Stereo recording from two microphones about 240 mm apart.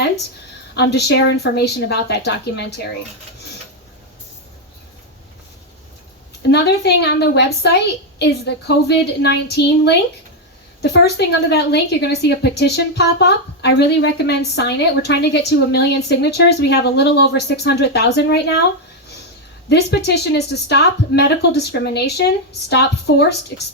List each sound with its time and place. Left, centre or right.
0.7 s a woman's voice: left
6.5 s a woman's voice: left
19.6 s a woman's voice: left